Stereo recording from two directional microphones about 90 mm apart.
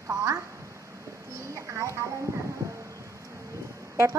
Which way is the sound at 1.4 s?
35° right (ahead or behind).